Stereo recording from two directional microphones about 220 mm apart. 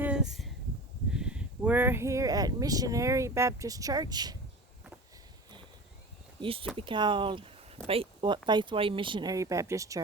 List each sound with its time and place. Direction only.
0.0 s a sound: 5° right (ahead or behind)
1.1 s speech: 5° right (ahead or behind)
6.4 s speech: 25° right (ahead or behind)